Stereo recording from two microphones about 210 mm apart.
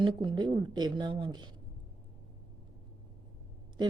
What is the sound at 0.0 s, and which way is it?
A woman's voice, 20° right (ahead or behind).